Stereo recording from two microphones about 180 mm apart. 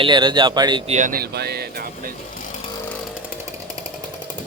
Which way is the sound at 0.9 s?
45° right (ahead or behind).